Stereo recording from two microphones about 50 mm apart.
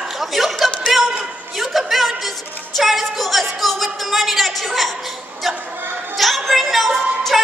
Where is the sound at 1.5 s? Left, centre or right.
Centre.